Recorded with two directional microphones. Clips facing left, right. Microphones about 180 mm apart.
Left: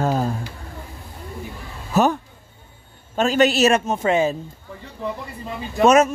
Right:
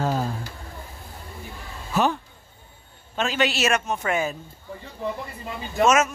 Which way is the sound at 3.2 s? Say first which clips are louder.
Left 7 dB; 40° left (ahead or behind).